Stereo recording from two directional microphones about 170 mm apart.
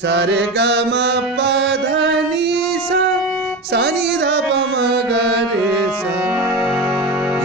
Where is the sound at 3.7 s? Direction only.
75° right (ahead or behind).